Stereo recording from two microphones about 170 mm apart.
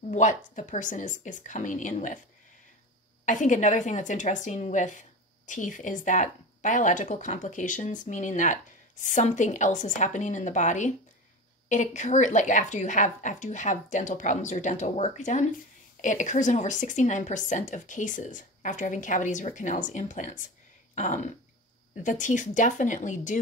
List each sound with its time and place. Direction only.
0.1 s a woman's voice: 45° left (ahead or behind)
3.3 s a woman's voice: 50° left (ahead or behind)